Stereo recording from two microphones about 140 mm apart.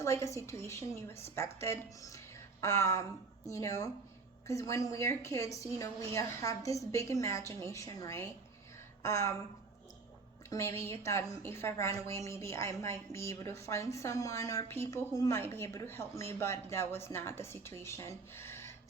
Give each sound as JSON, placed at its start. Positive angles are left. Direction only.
{"t": 0.0, "sound": "a woman's voice", "side_deg": 20}
{"t": 10.5, "sound": "a woman's voice", "side_deg": 20}